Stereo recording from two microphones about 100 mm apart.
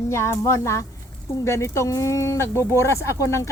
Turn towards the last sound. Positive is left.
turn(degrees=30)  # may be behind; listen again after turning